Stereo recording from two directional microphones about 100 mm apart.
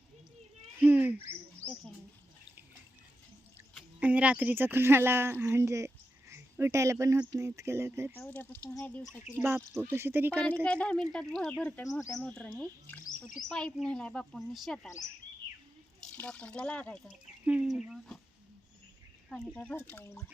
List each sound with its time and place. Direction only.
0.8 s speech: 20° right (ahead or behind)
4.0 s a woman's voice: 15° right (ahead or behind)
8.2 s speech: 15° left (ahead or behind)
9.9 s a woman's voice: 20° right (ahead or behind)
10.4 s speech: 10° left (ahead or behind)
16.1 s speech: 15° left (ahead or behind)
17.4 s speech: 10° right (ahead or behind)
19.7 s speech: 25° left (ahead or behind)